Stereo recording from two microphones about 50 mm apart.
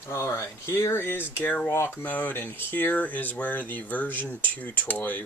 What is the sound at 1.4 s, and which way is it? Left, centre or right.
Speech, left.